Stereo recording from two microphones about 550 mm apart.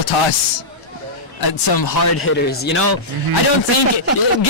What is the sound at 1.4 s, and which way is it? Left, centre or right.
Speech, left.